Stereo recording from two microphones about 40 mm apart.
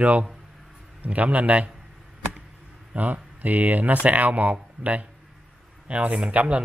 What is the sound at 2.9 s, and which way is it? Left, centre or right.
Speech, right.